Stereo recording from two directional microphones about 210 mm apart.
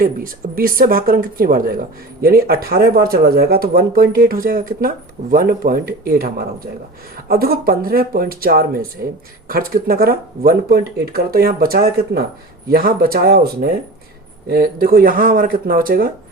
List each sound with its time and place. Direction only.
0.0 s speech: 45° right (ahead or behind)